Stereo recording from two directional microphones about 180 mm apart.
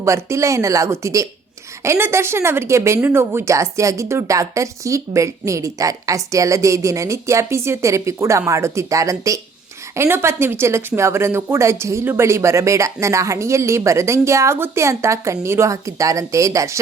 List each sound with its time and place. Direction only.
0.0 s speech: 15° right (ahead or behind)